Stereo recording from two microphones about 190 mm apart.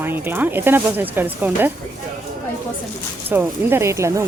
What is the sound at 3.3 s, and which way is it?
Speech, 10° right (ahead or behind).